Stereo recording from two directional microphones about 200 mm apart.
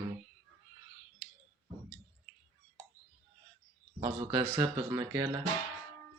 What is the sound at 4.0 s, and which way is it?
Speech, 25° right (ahead or behind).